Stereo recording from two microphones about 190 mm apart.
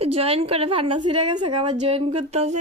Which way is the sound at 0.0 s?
30° right (ahead or behind).